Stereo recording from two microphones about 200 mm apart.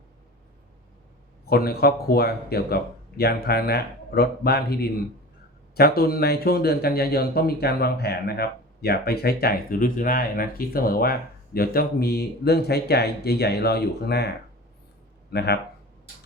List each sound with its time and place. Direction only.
1.5 s speech: 50° left (ahead or behind)
15.3 s speech: 55° left (ahead or behind)